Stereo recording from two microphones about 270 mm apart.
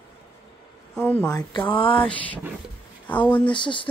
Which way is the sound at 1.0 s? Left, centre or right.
Centre.